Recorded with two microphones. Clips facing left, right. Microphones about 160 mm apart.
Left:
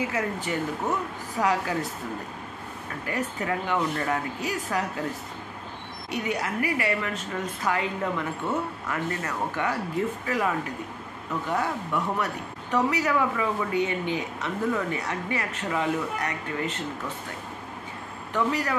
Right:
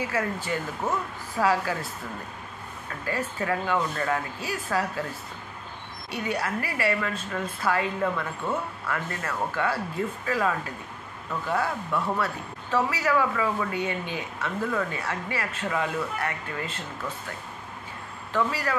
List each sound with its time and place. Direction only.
0.1 s a woman's voice: 20° left (ahead or behind)
3.1 s a woman's voice: 20° left (ahead or behind)
6.0 s a woman's voice: 15° left (ahead or behind)
11.5 s a woman's voice: 15° left (ahead or behind)
18.3 s speech: 20° left (ahead or behind)